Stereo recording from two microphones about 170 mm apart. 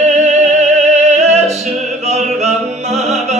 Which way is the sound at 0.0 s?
40° right (ahead or behind).